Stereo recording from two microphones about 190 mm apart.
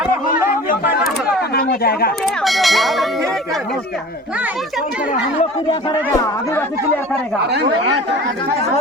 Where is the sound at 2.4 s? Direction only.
Centre (ahead or behind).